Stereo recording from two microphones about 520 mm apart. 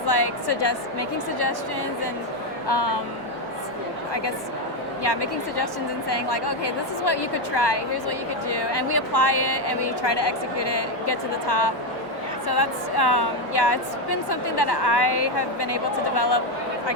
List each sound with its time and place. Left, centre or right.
0.1 s a woman's voice: left
2.6 s a woman's voice: left
5.0 s a woman's voice: left